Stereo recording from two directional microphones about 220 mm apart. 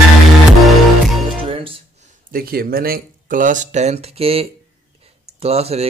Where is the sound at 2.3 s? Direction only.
45° right (ahead or behind).